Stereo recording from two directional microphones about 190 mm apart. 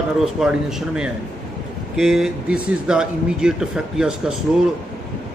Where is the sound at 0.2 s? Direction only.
Centre (ahead or behind).